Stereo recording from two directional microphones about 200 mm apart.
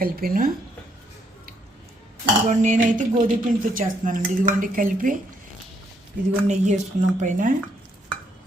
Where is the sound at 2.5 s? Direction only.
40° right (ahead or behind).